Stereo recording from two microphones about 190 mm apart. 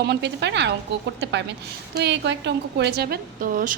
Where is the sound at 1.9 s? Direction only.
65° right (ahead or behind); by 3.7 s 45° right (ahead or behind).